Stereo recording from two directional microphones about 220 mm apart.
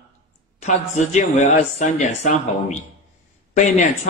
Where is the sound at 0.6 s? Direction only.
30° left (ahead or behind).